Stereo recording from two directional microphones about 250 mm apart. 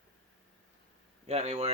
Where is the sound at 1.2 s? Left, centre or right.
Right.